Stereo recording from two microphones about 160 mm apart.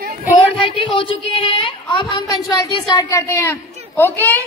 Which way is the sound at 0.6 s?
30° left (ahead or behind).